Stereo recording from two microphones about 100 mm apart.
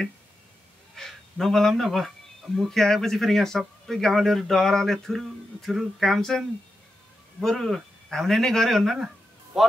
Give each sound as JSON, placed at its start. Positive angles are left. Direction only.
{"t": 0.9, "sound": "speech", "side_deg": 5}